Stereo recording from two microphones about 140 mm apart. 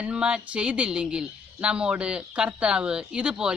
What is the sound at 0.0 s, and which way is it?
Speech, 5° right (ahead or behind).